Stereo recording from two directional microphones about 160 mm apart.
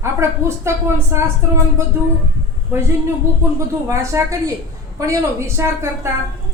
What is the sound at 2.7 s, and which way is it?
A woman's voice, 15° right (ahead or behind).